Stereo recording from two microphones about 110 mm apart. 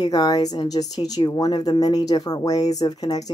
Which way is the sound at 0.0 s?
35° left (ahead or behind).